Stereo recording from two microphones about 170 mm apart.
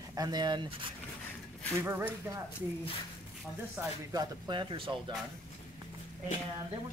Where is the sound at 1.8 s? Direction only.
15° right (ahead or behind).